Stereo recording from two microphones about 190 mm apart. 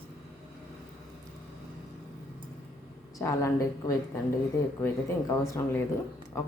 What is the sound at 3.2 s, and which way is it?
A woman's voice, 15° left (ahead or behind).